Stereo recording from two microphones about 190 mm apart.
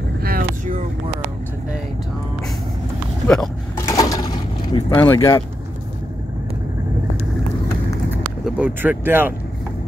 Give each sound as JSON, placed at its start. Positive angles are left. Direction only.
{"t": 0.2, "sound": "vehicle", "side_deg": -50}
{"t": 3.7, "sound": "a sound", "side_deg": 15}
{"t": 8.2, "sound": "speech", "side_deg": -5}